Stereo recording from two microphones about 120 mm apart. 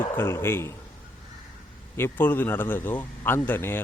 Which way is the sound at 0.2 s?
20° left (ahead or behind).